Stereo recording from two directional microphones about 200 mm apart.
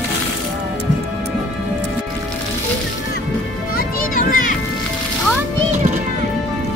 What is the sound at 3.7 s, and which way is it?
Music, 45° left (ahead or behind).